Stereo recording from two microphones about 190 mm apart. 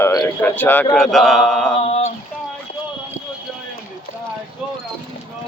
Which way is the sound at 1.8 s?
35° left (ahead or behind).